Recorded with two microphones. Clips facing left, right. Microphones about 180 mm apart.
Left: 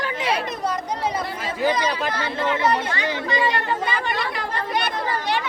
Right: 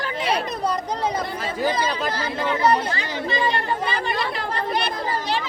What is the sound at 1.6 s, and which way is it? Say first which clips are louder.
Speech: left 2 dB; 40° right (ahead or behind).